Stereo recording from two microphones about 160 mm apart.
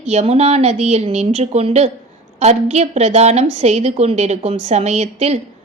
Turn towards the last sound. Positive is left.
turn(degrees=-40)  # may be behind; listen again after turning